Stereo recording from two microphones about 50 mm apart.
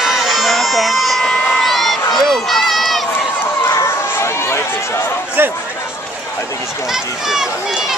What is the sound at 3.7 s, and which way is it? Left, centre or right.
Run, left.